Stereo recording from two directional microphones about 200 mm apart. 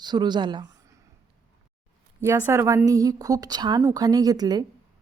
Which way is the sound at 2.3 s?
10° right (ahead or behind).